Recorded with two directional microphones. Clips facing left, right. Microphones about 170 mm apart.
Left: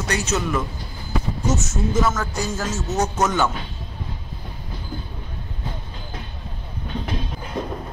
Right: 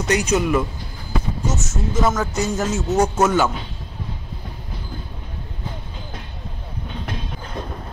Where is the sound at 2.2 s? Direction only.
20° right (ahead or behind).